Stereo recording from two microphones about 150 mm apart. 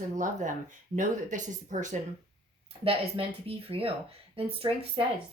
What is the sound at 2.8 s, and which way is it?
Speech, 40° right (ahead or behind).